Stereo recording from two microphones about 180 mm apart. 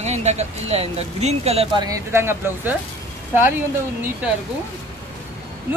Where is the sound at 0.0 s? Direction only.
40° right (ahead or behind); by 2.8 s 10° right (ahead or behind).